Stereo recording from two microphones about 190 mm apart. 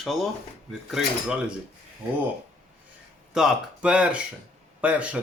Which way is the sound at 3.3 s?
5° right (ahead or behind).